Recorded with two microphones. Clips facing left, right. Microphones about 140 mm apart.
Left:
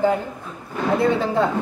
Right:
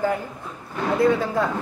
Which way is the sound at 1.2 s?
25° left (ahead or behind).